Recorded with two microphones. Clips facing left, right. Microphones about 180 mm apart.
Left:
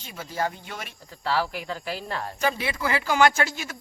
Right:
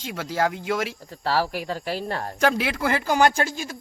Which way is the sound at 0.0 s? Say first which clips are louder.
Right 5 dB; 90° right.